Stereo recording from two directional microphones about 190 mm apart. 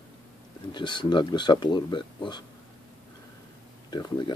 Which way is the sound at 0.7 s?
25° left (ahead or behind).